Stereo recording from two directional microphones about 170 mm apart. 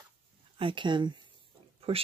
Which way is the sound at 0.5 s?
30° right (ahead or behind).